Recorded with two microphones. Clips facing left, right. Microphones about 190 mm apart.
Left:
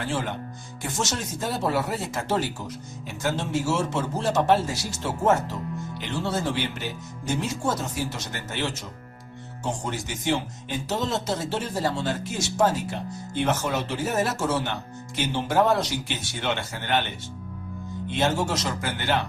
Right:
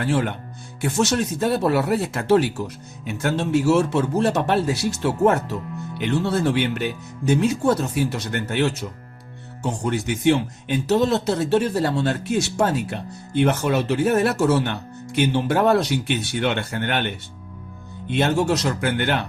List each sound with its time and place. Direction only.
0.1 s speech: 65° right (ahead or behind)
9.8 s speech: 65° right (ahead or behind)
18.2 s speech: 60° right (ahead or behind)